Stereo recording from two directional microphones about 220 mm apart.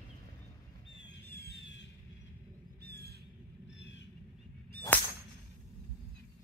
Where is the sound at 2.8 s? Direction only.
45° right (ahead or behind).